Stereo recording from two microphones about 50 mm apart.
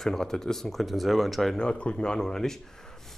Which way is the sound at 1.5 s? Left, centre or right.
Left.